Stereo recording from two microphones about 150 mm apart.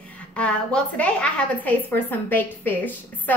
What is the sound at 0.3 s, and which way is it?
A woman's voice, 5° left (ahead or behind).